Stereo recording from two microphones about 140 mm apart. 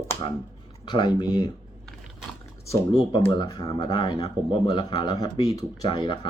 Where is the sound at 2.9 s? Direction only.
40° left (ahead or behind).